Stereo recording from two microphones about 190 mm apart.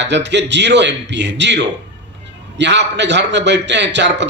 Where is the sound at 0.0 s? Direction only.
65° right (ahead or behind).